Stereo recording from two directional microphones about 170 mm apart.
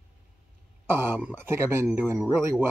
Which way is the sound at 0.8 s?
15° right (ahead or behind).